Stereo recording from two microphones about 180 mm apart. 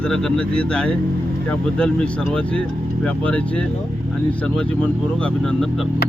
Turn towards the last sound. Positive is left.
turn(degrees=5)  # may be behind; listen again after turning